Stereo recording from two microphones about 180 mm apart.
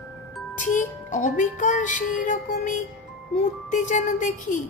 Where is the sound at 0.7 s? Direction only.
45° left (ahead or behind).